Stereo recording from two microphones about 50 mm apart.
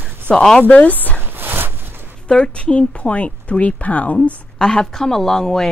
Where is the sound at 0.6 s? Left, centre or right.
Left.